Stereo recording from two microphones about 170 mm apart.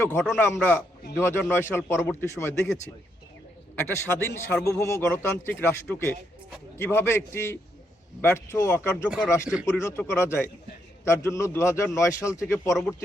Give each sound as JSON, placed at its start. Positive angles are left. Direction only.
{"t": 0.0, "sound": "a man's voice", "side_deg": 15}
{"t": 3.8, "sound": "a man's voice", "side_deg": 15}
{"t": 9.0, "sound": "speech", "side_deg": -5}
{"t": 9.7, "sound": "a man's voice", "side_deg": 15}
{"t": 12.7, "sound": "speech", "side_deg": 0}